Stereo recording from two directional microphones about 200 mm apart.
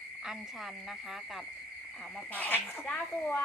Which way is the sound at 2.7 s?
5° left (ahead or behind).